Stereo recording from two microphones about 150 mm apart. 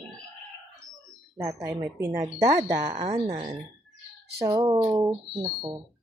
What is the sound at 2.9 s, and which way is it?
Speech, 35° right (ahead or behind).